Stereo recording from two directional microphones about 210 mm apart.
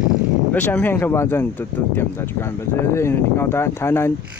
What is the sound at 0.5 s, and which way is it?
Speech, 10° left (ahead or behind).